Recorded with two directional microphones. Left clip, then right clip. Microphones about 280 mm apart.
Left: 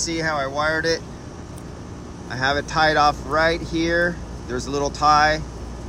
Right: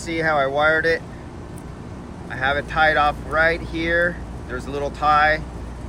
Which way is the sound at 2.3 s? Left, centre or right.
Centre.